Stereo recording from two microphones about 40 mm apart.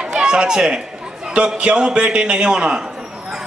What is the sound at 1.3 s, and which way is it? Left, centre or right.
A man's voice, right.